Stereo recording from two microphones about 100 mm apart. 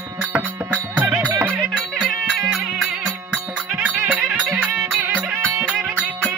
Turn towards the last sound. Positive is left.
turn(degrees=-10)  # may be behind; listen again after turning